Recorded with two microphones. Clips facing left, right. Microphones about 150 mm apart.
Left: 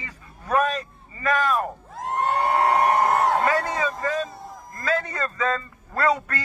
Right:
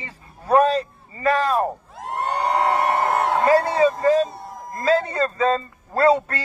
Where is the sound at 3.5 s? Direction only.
30° right (ahead or behind).